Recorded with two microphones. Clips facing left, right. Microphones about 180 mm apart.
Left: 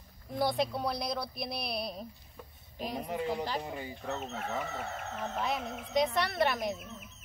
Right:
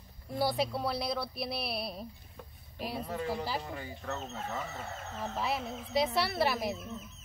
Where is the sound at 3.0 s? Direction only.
15° left (ahead or behind).